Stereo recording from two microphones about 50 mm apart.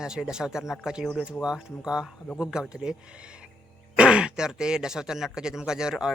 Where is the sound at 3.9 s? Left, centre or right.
Centre.